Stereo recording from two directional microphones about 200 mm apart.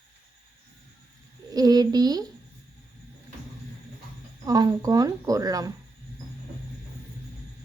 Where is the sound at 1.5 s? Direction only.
20° right (ahead or behind).